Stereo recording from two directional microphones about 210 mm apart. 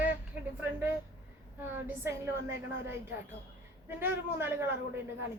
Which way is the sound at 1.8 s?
10° right (ahead or behind).